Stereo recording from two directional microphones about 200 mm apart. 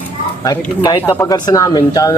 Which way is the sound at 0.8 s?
20° left (ahead or behind).